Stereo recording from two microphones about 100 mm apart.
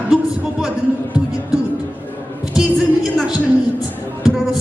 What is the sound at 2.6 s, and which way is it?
Music, 5° right (ahead or behind).